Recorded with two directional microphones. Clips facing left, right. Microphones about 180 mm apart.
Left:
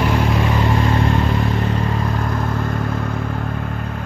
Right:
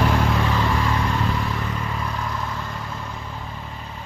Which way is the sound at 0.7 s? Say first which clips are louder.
Left 5 dB; 50° left (ahead or behind).